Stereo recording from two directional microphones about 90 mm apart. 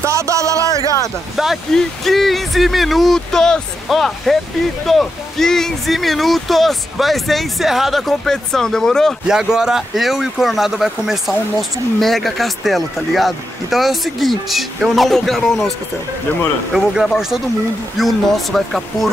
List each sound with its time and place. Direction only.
0.0 s music: 35° right (ahead or behind)
1.3 s speech: centre (ahead or behind)
9.3 s speech: 5° right (ahead or behind)
16.7 s speech: centre (ahead or behind)